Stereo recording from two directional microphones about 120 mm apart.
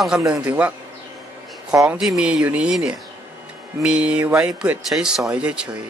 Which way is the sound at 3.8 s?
10° right (ahead or behind).